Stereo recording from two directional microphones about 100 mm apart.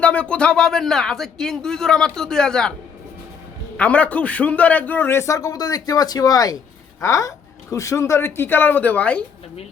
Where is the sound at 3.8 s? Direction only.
15° left (ahead or behind).